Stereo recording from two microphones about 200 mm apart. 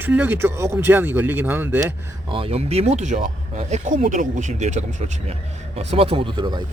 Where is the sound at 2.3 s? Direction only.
30° right (ahead or behind).